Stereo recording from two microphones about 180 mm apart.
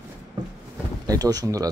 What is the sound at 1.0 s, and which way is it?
Speech, 20° right (ahead or behind).